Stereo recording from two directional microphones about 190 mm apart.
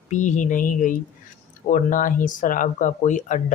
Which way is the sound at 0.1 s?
40° left (ahead or behind).